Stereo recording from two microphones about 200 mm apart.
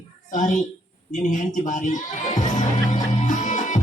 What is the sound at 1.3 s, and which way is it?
Music, 40° left (ahead or behind).